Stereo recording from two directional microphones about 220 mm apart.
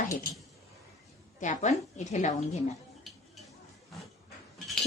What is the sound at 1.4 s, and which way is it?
A woman's voice, 35° left (ahead or behind).